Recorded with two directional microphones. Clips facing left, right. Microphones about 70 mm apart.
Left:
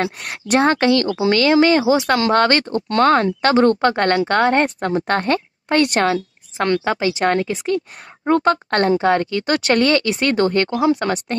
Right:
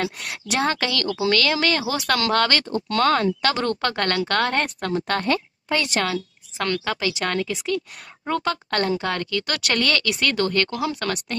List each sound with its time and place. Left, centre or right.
0.2 s a woman's voice: left
0.6 s a woman's voice: left
5.7 s a woman's voice: left
6.6 s speech: left